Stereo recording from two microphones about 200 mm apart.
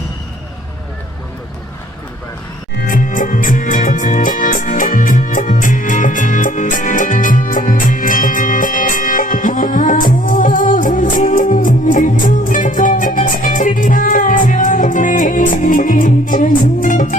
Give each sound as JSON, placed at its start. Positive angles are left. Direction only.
{"t": 2.7, "sound": "music", "side_deg": 45}